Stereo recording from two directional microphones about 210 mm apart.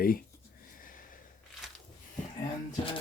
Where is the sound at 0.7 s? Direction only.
40° left (ahead or behind).